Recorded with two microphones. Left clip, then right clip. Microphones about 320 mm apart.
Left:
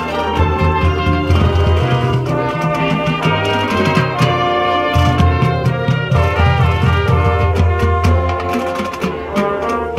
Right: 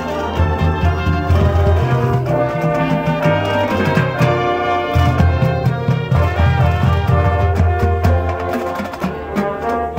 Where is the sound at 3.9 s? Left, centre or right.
Centre.